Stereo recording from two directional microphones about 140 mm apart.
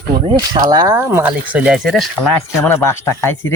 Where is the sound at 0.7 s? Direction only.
25° right (ahead or behind); by 2.1 s centre (ahead or behind).